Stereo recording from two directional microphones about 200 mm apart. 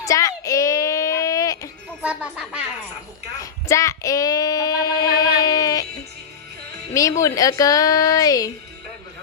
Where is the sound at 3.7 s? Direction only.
15° left (ahead or behind).